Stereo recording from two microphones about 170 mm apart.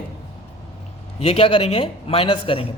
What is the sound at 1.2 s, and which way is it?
A man's voice, 35° left (ahead or behind).